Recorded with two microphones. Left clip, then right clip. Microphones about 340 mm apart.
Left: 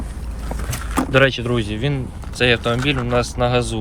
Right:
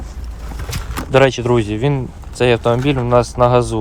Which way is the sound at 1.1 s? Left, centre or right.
Right.